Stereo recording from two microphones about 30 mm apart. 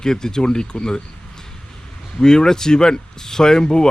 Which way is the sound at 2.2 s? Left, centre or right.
Left.